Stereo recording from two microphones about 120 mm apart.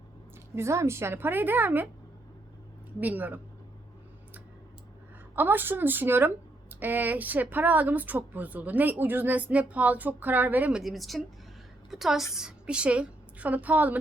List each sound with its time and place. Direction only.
0.5 s a woman's voice: 25° right (ahead or behind)
3.0 s a woman's voice: 15° right (ahead or behind)
5.3 s a woman's voice: 15° right (ahead or behind)